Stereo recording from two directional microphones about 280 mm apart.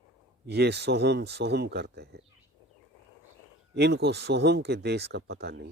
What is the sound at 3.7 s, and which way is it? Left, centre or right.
Speech, right.